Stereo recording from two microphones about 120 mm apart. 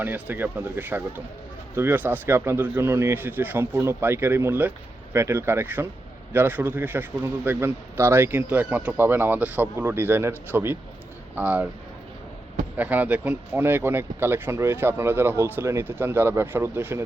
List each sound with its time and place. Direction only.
0.0 s a man's voice: 15° right (ahead or behind)
12.7 s speech: 15° right (ahead or behind)